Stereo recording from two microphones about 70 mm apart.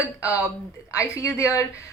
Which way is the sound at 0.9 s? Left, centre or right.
Left.